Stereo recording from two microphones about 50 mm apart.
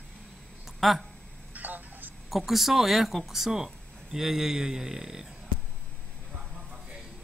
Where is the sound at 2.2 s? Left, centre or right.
Centre.